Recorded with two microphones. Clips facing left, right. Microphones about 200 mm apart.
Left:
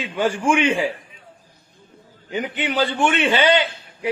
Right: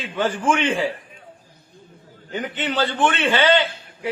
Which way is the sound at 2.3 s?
10° left (ahead or behind).